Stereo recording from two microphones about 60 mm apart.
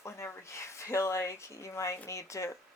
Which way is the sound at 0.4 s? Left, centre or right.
Left.